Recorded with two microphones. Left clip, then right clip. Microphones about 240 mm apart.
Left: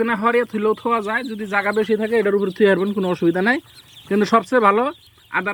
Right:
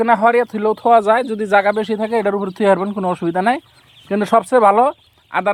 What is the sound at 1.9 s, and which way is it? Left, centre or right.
Speech, right.